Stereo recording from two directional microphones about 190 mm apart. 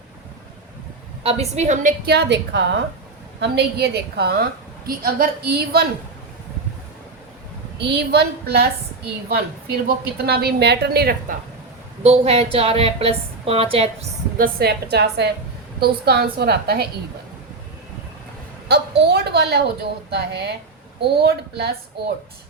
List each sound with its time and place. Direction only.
1.2 s a woman's voice: 35° right (ahead or behind)
2.0 s a woman's voice: 65° right (ahead or behind)
7.8 s a woman's voice: 60° right (ahead or behind)
10.2 s a woman's voice: 55° right (ahead or behind)
12.0 s a woman's voice: 35° right (ahead or behind)
14.3 s a woman's voice: 55° right (ahead or behind)
18.7 s a woman's voice: 60° right (ahead or behind)